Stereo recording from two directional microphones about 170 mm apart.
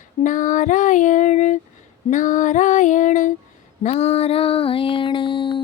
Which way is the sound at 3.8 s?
40° left (ahead or behind).